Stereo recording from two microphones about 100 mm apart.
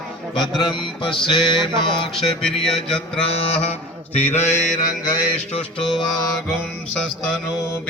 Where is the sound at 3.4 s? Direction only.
90° left.